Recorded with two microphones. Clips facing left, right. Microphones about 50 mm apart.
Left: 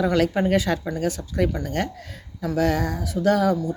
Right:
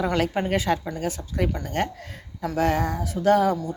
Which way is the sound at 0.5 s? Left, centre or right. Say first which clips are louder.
Left 2 dB; right.